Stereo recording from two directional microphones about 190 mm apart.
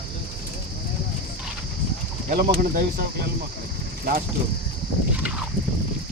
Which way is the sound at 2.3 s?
50° right (ahead or behind).